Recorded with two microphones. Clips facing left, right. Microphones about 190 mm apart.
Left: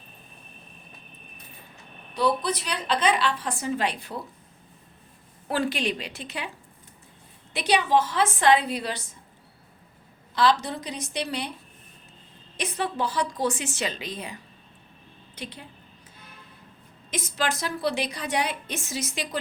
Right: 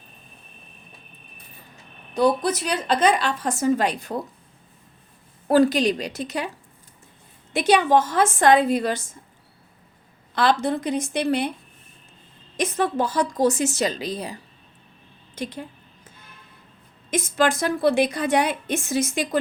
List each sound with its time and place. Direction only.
2.1 s a woman's voice: 45° right (ahead or behind)
5.5 s a woman's voice: 40° right (ahead or behind)
7.5 s a woman's voice: 45° right (ahead or behind)
10.3 s a woman's voice: 55° right (ahead or behind)
12.5 s a woman's voice: 45° right (ahead or behind)
15.4 s a woman's voice: 45° right (ahead or behind)
17.1 s a woman's voice: 50° right (ahead or behind)